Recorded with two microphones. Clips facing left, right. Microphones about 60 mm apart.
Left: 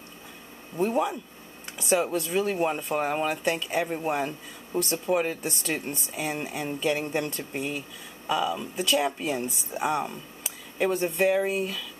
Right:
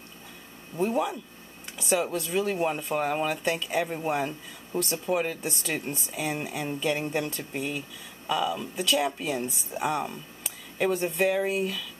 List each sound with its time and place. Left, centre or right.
0.7 s speech: centre